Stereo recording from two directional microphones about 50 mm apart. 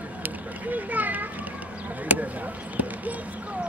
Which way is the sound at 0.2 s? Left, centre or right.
Right.